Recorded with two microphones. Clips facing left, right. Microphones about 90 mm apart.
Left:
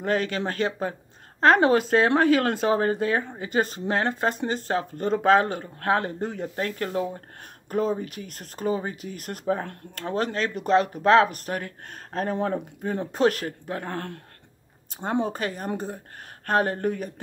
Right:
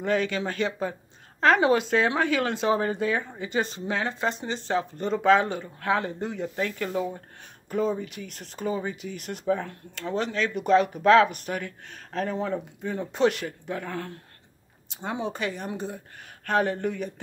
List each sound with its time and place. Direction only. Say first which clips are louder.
0.0 s speech: even; 40° left (ahead or behind)